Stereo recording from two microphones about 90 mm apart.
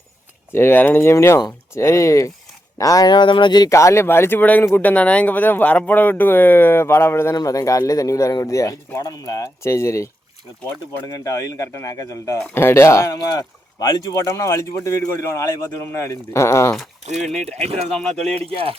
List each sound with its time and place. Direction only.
0.5 s speech: 25° left (ahead or behind); by 3.2 s 40° left (ahead or behind)
3.2 s speech: 65° left (ahead or behind)
3.7 s speech: 35° left (ahead or behind)
7.3 s speech: 40° left (ahead or behind)
12.5 s speech: 25° left (ahead or behind)
13.7 s speech: 45° left (ahead or behind)
17.5 s speech: 10° left (ahead or behind)
18.3 s speech: 90° right